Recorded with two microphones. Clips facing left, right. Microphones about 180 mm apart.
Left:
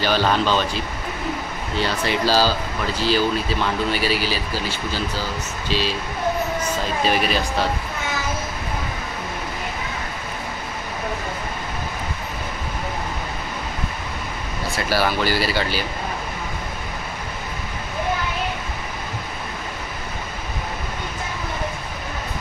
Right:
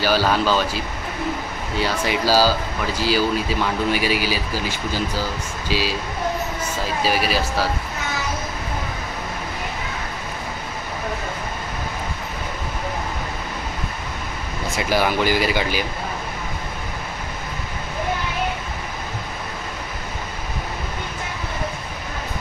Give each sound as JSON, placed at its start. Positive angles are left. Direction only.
{"t": 0.0, "sound": "speech", "side_deg": -10}
{"t": 1.8, "sound": "speech", "side_deg": -10}
{"t": 14.7, "sound": "speech", "side_deg": -15}